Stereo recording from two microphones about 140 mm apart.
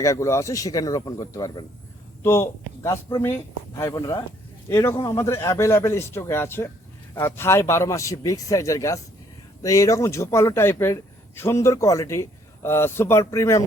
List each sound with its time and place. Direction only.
0.0 s a man's voice: 20° left (ahead or behind)